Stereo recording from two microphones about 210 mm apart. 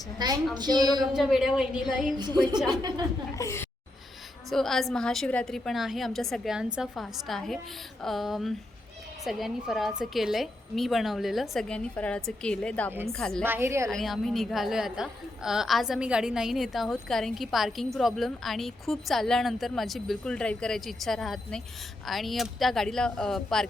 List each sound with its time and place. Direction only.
0.2 s a woman's voice: 20° right (ahead or behind)
1.1 s a woman's voice: centre (ahead or behind)
2.1 s a woman's voice: 20° right (ahead or behind)
3.3 s speech: 15° left (ahead or behind)
4.4 s a woman's voice: centre (ahead or behind)
13.4 s a woman's voice: 10° right (ahead or behind)
13.9 s a woman's voice: centre (ahead or behind)